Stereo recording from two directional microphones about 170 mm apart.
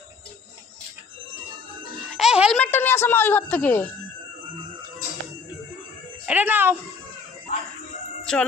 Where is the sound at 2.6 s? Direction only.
10° left (ahead or behind).